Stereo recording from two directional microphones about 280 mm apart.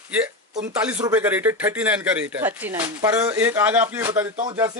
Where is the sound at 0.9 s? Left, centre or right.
Centre.